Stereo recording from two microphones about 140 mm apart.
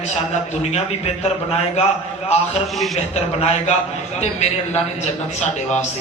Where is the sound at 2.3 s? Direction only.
50° left (ahead or behind).